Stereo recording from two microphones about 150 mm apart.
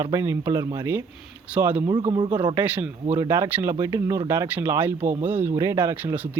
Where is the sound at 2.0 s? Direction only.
35° right (ahead or behind).